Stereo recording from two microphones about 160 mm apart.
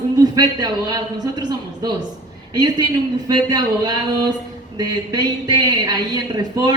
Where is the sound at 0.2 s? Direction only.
25° right (ahead or behind).